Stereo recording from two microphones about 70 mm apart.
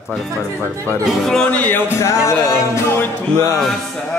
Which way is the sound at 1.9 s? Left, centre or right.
Left.